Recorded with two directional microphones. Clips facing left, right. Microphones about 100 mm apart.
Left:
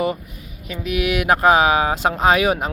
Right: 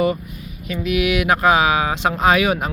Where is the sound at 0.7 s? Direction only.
40° left (ahead or behind).